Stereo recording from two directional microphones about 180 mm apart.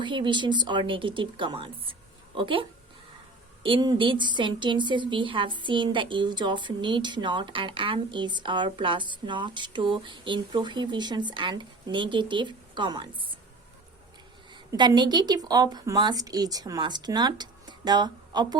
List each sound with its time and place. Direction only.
0.0 s a woman's voice: 25° right (ahead or behind)
14.7 s a woman's voice: 25° right (ahead or behind)